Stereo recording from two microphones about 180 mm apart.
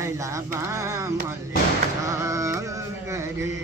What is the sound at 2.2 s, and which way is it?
Carnatic music, 15° right (ahead or behind).